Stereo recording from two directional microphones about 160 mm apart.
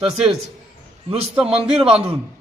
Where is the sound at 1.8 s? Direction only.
35° right (ahead or behind).